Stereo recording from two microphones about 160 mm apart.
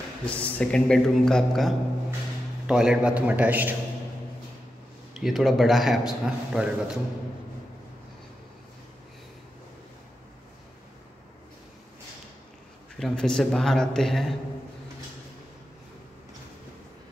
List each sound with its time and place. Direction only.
0.2 s a man's voice: 5° left (ahead or behind); by 3.7 s 10° right (ahead or behind)
5.1 s a man's voice: centre (ahead or behind)
12.9 s a man's voice: 5° left (ahead or behind)